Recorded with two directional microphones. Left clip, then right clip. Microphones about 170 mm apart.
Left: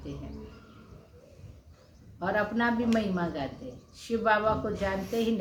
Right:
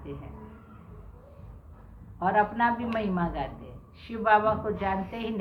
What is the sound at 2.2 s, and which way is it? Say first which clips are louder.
A woman's voice: right 4 dB; 30° left (ahead or behind).